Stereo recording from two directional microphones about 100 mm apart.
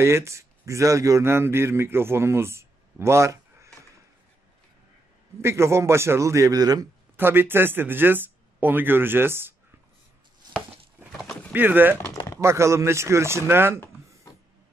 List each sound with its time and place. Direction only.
0.0 s speech: 30° right (ahead or behind)
5.4 s speech: 25° right (ahead or behind)
7.2 s speech: 20° right (ahead or behind)
11.1 s a sound: 5° left (ahead or behind)
11.5 s speech: 20° right (ahead or behind)